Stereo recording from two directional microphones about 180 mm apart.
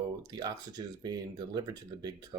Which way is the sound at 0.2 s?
20° right (ahead or behind).